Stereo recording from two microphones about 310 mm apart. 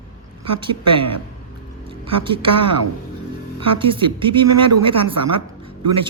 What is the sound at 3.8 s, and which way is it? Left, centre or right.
Speech, centre.